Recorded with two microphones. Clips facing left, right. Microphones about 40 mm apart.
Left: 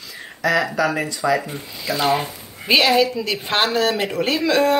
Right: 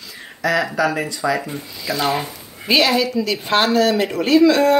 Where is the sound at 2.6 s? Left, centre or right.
Centre.